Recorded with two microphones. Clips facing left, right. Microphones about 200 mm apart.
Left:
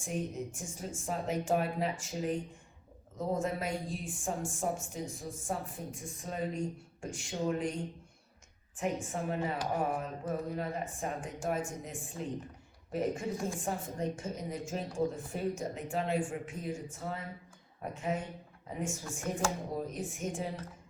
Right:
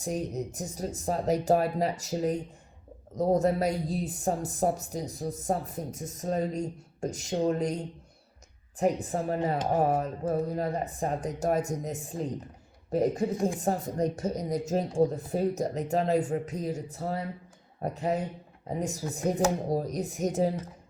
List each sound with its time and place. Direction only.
0.0 s speech: 40° right (ahead or behind)